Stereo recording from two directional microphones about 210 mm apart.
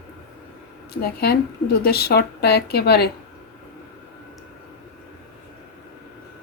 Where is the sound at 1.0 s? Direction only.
50° left (ahead or behind).